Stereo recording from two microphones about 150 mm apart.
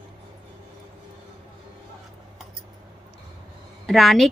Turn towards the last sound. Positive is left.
turn(degrees=0)  # may be behind; listen again after turning